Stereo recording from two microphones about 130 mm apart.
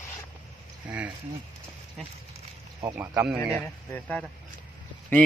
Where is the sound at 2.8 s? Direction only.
20° right (ahead or behind).